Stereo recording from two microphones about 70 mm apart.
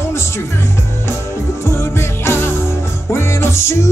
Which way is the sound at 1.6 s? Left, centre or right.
Left.